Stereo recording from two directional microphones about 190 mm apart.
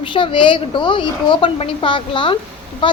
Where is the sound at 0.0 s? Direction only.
25° left (ahead or behind).